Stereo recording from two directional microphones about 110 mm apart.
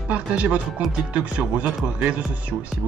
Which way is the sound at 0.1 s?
10° right (ahead or behind).